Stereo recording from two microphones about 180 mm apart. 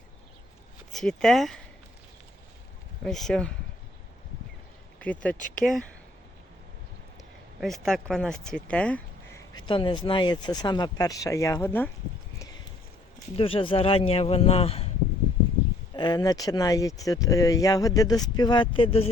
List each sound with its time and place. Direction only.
0.9 s speech: centre (ahead or behind)
3.0 s speech: centre (ahead or behind)
5.4 s speech: 45° left (ahead or behind)
7.6 s speech: centre (ahead or behind)
9.6 s speech: 30° left (ahead or behind); by 11.9 s 10° left (ahead or behind)
13.3 s speech: 30° left (ahead or behind)
16.0 s speech: 25° left (ahead or behind)